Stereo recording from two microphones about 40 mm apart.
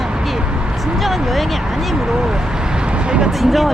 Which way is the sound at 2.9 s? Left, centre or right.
Right.